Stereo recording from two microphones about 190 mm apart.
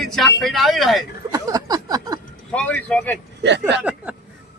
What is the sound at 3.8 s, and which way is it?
Speech, 10° right (ahead or behind).